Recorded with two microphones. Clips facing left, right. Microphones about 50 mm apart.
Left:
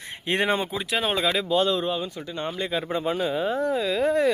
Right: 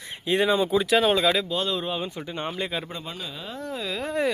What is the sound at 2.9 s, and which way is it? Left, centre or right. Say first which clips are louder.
Speech: left 11 dB; left.